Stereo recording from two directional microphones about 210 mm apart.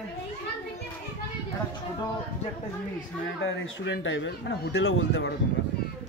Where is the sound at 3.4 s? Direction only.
60° left (ahead or behind).